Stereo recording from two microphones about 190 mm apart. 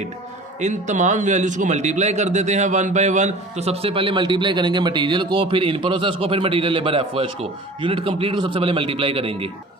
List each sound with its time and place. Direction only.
0.6 s a man's voice: 40° right (ahead or behind)